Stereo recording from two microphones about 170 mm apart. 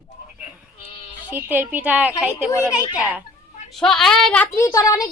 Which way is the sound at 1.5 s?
10° right (ahead or behind).